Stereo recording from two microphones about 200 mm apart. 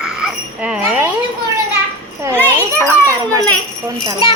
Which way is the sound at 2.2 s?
15° right (ahead or behind).